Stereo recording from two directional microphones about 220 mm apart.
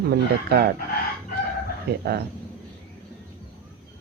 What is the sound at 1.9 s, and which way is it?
Speech, 45° right (ahead or behind).